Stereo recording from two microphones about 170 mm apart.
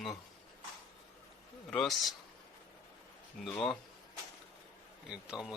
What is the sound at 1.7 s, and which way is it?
Speech, centre (ahead or behind).